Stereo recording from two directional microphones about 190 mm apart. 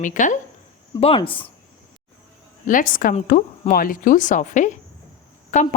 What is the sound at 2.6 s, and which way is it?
Speech, 45° left (ahead or behind).